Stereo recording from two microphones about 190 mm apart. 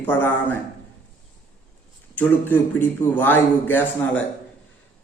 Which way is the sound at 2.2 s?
10° left (ahead or behind).